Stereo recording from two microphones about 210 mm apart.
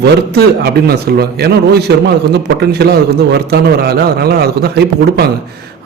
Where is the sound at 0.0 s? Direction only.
50° right (ahead or behind).